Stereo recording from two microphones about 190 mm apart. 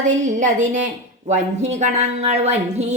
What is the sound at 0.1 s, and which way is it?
A woman's voice, 40° right (ahead or behind).